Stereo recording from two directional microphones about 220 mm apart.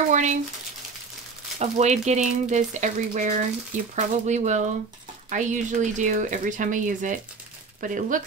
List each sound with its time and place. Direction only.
0.1 s speech: 35° right (ahead or behind)
1.6 s speech: 30° right (ahead or behind)